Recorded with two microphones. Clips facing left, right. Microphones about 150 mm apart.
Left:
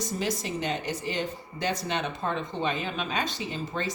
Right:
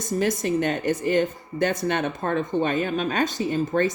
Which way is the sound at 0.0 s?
50° right (ahead or behind).